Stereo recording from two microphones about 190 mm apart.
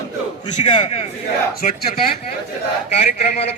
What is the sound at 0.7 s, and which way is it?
Speech, 30° left (ahead or behind).